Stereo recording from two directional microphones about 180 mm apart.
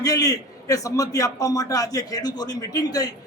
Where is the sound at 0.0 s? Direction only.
20° left (ahead or behind).